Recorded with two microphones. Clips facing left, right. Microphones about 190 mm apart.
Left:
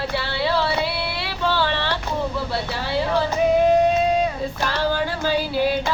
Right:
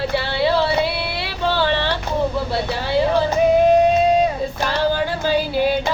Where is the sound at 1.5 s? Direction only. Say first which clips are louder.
Right 4 dB; 25° right (ahead or behind).